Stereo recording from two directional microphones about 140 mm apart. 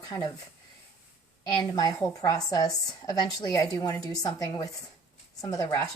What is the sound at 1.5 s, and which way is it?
A woman's voice, 30° left (ahead or behind).